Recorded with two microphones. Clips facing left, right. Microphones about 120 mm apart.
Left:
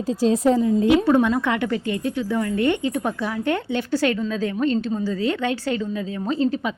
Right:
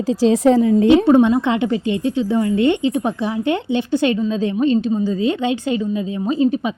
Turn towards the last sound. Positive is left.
turn(degrees=-20)  # may be behind; listen again after turning